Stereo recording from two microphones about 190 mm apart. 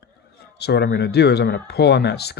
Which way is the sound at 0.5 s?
60° left (ahead or behind).